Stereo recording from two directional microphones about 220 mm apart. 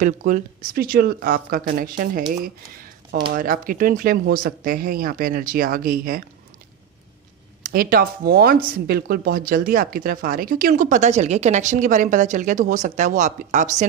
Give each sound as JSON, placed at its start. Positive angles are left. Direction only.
{"t": 0.0, "sound": "speech", "side_deg": -35}
{"t": 3.3, "sound": "speech", "side_deg": -40}
{"t": 7.6, "sound": "speech", "side_deg": -40}